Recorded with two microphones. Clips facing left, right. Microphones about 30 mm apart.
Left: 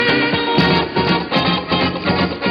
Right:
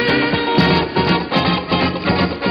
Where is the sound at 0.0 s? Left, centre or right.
Centre.